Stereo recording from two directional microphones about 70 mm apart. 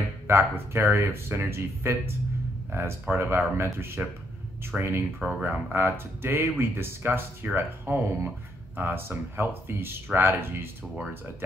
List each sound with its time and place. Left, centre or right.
0.3 s speech: right
5.3 s speech: right
5.8 s speech: right